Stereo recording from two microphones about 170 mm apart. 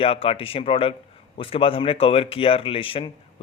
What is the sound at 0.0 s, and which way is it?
Speech, 35° left (ahead or behind).